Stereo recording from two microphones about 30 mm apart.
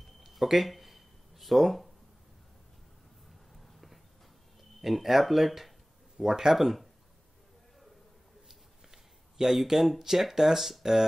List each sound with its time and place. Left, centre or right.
0.2 s a sound: centre
4.8 s speech: centre
6.2 s speech: centre
6.5 s speech: centre
8.5 s a sound: centre
10.3 s speech: centre